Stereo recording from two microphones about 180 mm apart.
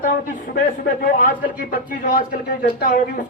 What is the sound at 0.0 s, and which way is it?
A man's voice, 45° left (ahead or behind).